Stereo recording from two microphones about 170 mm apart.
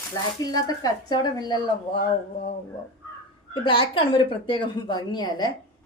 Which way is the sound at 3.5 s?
30° left (ahead or behind).